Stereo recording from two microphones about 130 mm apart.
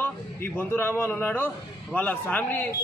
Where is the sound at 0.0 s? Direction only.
15° left (ahead or behind).